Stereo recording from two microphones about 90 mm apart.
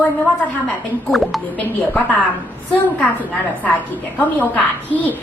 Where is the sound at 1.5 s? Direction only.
20° left (ahead or behind).